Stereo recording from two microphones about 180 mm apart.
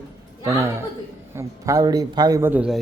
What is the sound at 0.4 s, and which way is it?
A man's voice, 15° right (ahead or behind).